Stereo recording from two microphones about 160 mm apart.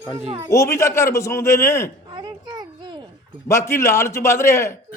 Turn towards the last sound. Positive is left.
turn(degrees=15)  # may be behind; listen again after turning